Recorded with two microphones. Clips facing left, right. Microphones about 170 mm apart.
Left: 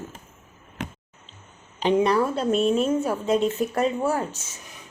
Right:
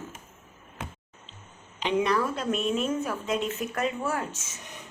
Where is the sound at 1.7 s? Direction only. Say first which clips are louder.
Left 5 dB; 35° left (ahead or behind).